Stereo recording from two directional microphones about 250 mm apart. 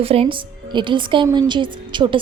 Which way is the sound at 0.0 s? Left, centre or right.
Right.